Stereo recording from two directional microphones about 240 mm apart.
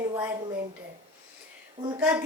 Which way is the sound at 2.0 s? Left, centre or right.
Centre.